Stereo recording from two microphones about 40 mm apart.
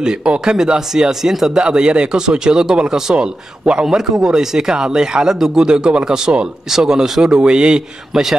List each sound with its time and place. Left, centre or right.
0.0 s speech: right
1.6 s speech: right
3.8 s speech: centre
8.1 s speech: centre